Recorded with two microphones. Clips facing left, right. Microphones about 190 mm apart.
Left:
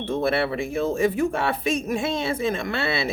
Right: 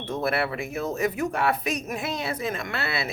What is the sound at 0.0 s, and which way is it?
Speech, 30° left (ahead or behind).